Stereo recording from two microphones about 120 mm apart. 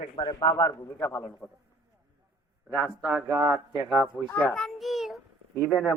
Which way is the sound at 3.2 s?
25° right (ahead or behind).